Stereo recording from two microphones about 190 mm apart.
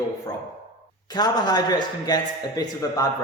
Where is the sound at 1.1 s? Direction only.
20° left (ahead or behind).